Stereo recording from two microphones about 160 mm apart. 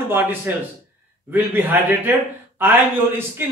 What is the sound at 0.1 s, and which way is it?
A man's voice, 15° right (ahead or behind).